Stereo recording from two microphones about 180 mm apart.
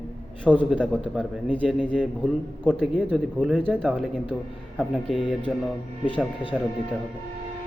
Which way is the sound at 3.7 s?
10° right (ahead or behind).